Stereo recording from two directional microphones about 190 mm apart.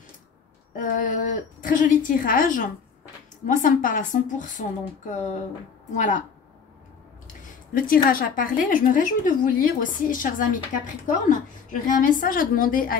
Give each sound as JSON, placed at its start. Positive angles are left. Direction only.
{"t": 0.7, "sound": "a woman's voice", "side_deg": 45}
{"t": 7.7, "sound": "a woman's voice", "side_deg": 50}